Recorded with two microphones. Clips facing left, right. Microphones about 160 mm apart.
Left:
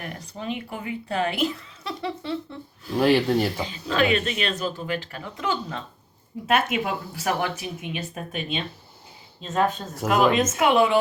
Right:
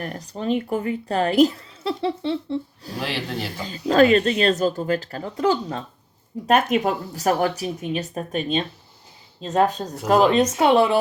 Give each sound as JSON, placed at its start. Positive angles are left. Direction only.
{"t": 0.0, "sound": "a woman's voice", "side_deg": -35}
{"t": 2.9, "sound": "speech", "side_deg": 45}
{"t": 3.6, "sound": "a woman's voice", "side_deg": -40}